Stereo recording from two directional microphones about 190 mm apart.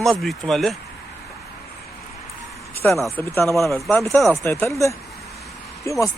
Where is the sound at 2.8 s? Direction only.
10° left (ahead or behind).